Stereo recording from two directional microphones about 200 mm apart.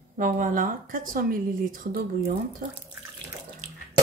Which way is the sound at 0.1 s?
40° right (ahead or behind).